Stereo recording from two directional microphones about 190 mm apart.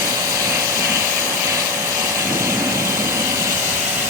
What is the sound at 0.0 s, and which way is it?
Vehicle, 20° right (ahead or behind).